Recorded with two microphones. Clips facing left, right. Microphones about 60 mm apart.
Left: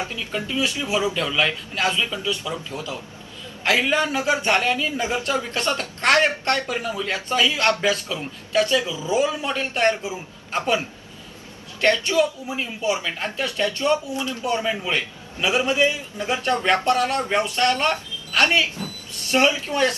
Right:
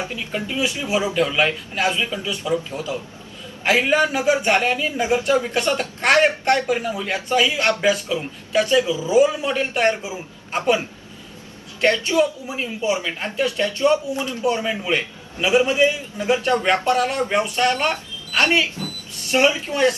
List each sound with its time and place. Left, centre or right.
0.3 s speech: right
19.3 s speech: centre